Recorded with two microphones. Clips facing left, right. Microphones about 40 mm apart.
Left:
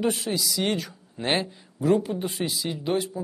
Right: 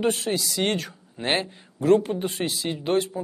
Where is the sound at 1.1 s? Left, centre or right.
Centre.